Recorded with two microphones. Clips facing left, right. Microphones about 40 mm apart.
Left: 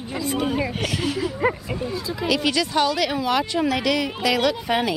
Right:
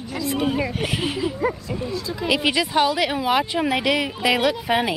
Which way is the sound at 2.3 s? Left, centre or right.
Centre.